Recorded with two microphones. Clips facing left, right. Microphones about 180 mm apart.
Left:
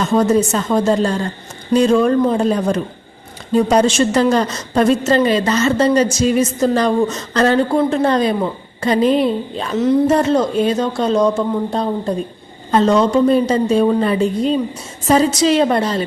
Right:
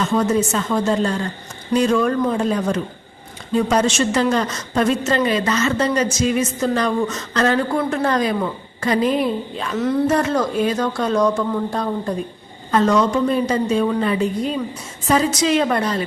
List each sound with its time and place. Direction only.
0.1 s a woman's voice: 40° left (ahead or behind)